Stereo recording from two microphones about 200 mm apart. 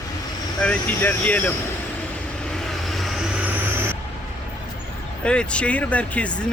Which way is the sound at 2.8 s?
Centre (ahead or behind).